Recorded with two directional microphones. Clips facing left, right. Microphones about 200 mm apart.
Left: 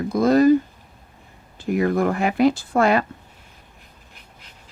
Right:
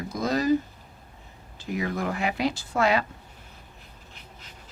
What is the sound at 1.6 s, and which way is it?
Speech, 55° left (ahead or behind).